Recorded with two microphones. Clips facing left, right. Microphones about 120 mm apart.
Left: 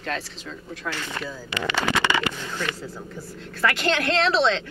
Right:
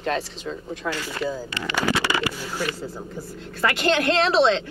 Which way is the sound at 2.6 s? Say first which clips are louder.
Right 2 dB; 25° right (ahead or behind).